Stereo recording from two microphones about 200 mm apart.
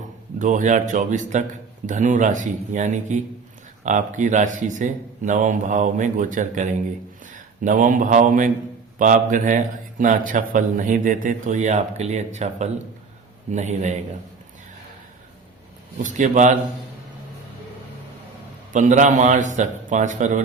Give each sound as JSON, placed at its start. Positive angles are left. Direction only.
{"t": 0.3, "sound": "a man's voice", "side_deg": -40}
{"t": 16.0, "sound": "a man's voice", "side_deg": -40}
{"t": 18.7, "sound": "a man's voice", "side_deg": -40}